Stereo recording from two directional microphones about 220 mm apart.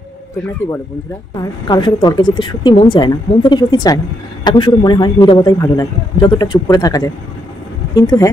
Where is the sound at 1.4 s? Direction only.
15° left (ahead or behind).